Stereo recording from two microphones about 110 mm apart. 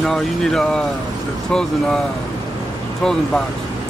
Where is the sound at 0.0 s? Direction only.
5° left (ahead or behind).